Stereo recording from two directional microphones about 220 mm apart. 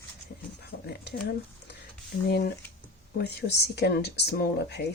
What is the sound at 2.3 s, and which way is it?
Speech, 45° left (ahead or behind).